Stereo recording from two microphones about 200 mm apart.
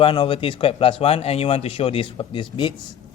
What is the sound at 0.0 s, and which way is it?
Speech, 25° left (ahead or behind).